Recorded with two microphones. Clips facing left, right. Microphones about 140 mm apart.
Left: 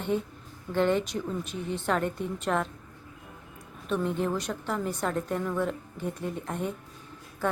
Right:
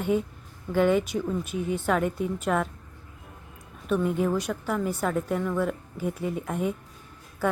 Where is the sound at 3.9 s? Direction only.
5° right (ahead or behind).